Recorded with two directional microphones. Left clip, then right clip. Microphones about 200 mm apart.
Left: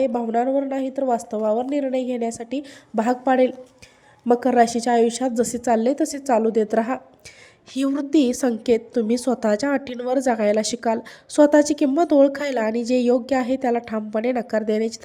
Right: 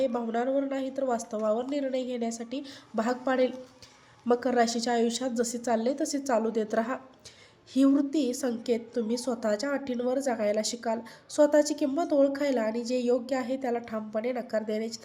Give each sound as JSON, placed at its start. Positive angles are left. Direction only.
{"t": 0.0, "sound": "a woman's voice", "side_deg": 35}